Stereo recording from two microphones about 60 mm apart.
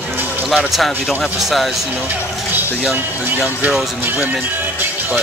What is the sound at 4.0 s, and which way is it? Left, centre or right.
Speech, right.